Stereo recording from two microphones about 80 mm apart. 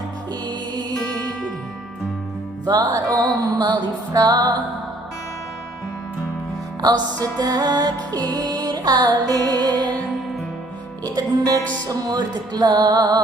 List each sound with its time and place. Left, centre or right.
0.4 s music: right
2.6 s music: right
4.1 s speech: right
6.8 s music: right
11.0 s speech: right
11.9 s music: right